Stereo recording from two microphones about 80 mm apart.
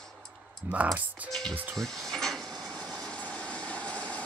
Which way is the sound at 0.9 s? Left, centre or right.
Centre.